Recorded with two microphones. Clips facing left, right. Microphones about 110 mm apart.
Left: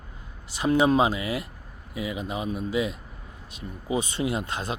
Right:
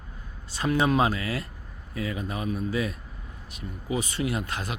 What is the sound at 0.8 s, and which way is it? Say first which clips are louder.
Speech: left 2 dB; 20° left (ahead or behind).